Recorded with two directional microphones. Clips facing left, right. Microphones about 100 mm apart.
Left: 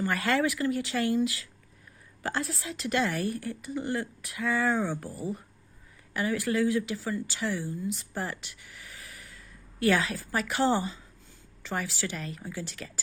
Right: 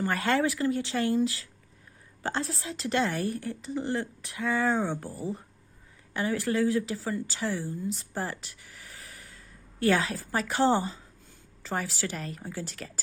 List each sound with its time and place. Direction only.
0.0 s a woman's voice: 30° right (ahead or behind)